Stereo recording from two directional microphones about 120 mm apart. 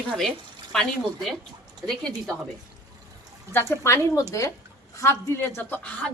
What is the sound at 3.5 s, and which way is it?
A woman's voice, 20° left (ahead or behind).